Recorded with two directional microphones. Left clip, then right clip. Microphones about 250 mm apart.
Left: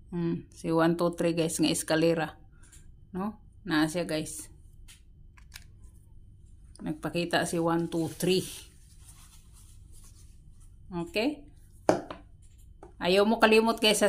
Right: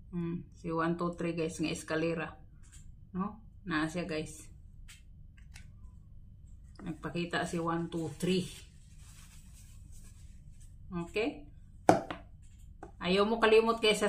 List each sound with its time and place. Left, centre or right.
0.1 s a woman's voice: left
6.8 s speech: left
10.9 s speech: left
12.9 s speech: left